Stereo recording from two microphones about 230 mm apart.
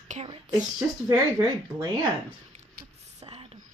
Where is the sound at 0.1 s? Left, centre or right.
Right.